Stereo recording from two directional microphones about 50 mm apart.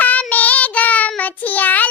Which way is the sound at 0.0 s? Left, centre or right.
Left.